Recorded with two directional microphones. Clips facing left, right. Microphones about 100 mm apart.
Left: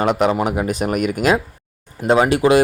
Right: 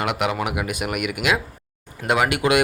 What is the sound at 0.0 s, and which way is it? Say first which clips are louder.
Speech: left 6 dB; 40° left (ahead or behind).